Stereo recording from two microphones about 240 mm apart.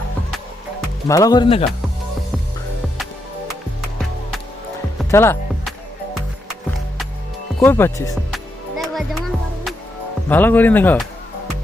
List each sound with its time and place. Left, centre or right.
1.0 s speech: centre
5.1 s music: centre
7.6 s speech: centre
8.8 s music: centre
10.2 s speech: centre